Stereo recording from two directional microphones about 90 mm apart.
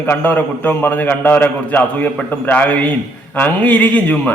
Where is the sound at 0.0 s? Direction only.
20° left (ahead or behind).